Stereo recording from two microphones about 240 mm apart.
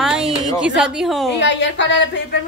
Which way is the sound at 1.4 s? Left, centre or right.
Left.